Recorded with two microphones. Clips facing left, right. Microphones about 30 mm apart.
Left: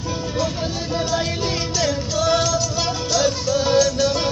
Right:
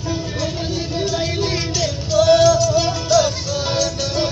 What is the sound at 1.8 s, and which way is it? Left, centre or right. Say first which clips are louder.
Music: right 5 dB; right.